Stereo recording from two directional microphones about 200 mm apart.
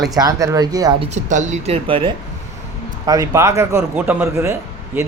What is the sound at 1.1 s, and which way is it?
A man's voice, 35° right (ahead or behind).